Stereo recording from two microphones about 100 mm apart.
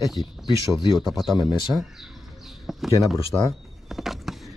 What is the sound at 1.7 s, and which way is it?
Bird, centre (ahead or behind).